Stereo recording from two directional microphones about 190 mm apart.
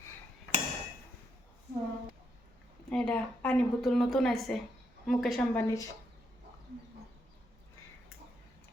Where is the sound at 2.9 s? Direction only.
5° left (ahead or behind).